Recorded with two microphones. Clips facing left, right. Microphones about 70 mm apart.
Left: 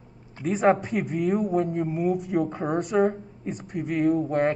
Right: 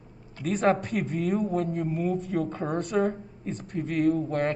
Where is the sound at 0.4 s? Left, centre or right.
Centre.